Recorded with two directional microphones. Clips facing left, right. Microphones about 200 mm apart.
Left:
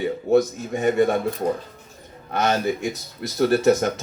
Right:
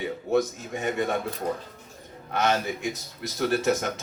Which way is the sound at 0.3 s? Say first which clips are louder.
Left 6 dB; 40° left (ahead or behind).